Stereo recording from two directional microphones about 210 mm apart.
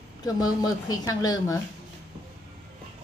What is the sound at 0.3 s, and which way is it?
A woman's voice, 20° left (ahead or behind).